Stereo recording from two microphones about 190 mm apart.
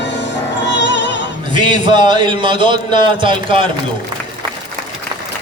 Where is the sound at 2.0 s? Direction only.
25° right (ahead or behind).